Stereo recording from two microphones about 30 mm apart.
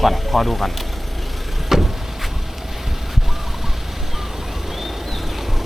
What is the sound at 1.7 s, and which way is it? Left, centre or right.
Vehicle, centre.